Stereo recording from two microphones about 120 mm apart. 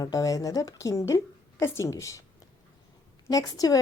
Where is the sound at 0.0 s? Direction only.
30° left (ahead or behind).